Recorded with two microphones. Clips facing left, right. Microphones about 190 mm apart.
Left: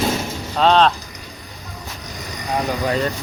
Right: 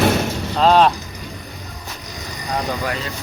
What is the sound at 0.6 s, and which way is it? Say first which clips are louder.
Speech: right 1 dB; 10° right (ahead or behind).